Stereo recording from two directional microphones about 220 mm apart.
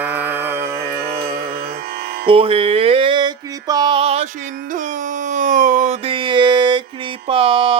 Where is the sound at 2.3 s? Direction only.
25° right (ahead or behind).